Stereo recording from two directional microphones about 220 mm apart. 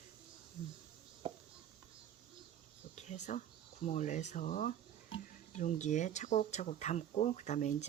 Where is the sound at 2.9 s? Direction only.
30° left (ahead or behind).